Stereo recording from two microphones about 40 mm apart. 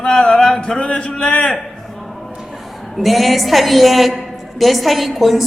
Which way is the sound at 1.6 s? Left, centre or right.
Centre.